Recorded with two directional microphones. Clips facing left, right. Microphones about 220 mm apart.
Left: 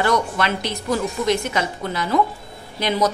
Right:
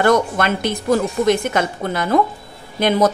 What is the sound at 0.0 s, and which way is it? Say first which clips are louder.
Speech: right 5 dB; 50° right (ahead or behind).